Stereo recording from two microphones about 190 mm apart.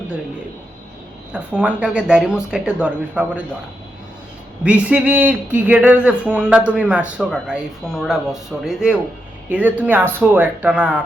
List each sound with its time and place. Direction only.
1.3 s a man's voice: 5° right (ahead or behind)
4.6 s a man's voice: 5° right (ahead or behind)